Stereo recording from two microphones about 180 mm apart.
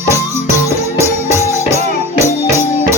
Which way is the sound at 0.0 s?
15° right (ahead or behind).